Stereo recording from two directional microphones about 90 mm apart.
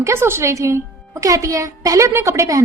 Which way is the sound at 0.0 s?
30° right (ahead or behind).